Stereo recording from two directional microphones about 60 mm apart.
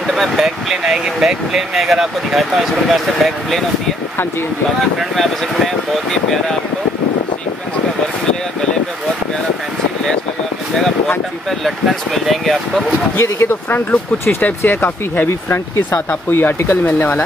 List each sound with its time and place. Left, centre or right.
0.1 s speech: centre
5.1 s speech: centre
11.6 s speech: centre
13.2 s speech: left